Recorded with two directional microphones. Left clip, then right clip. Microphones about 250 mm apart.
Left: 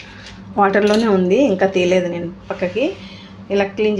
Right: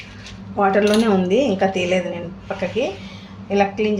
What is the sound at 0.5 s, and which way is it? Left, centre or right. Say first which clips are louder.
Speech: left 2 dB; left.